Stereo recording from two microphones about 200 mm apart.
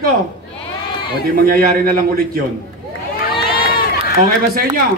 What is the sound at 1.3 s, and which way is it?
Speech, 45° right (ahead or behind).